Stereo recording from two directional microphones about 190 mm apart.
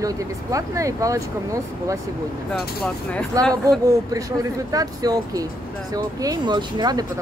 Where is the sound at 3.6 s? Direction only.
20° right (ahead or behind).